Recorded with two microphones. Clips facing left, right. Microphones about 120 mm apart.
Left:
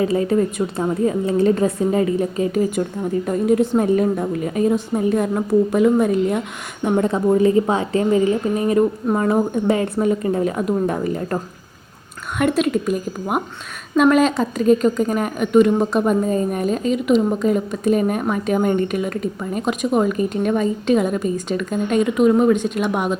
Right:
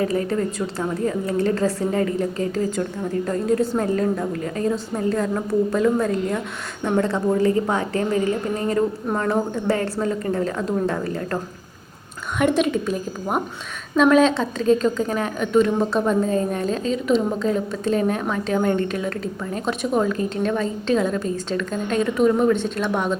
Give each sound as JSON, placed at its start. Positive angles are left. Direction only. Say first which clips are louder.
{"t": 0.0, "sound": "a woman's voice", "louder": "left 4 dB", "side_deg": 20}
{"t": 12.4, "sound": "a woman's voice", "louder": "left 1 dB", "side_deg": 0}